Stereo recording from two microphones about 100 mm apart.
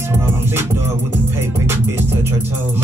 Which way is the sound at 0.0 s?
25° right (ahead or behind).